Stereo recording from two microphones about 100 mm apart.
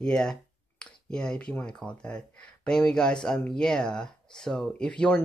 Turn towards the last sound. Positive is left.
turn(degrees=10)  # may be behind; listen again after turning